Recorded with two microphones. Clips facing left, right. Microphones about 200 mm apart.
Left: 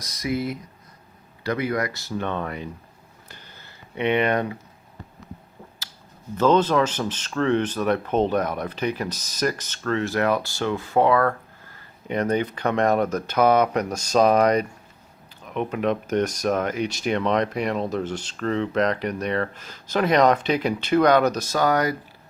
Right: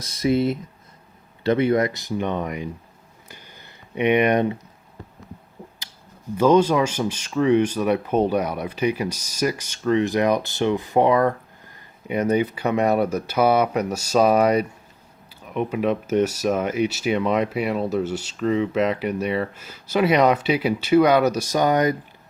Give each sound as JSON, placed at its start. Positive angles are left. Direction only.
{"t": 0.0, "sound": "speech", "side_deg": -30}
{"t": 3.2, "sound": "a sound", "side_deg": -10}
{"t": 6.3, "sound": "speech", "side_deg": -10}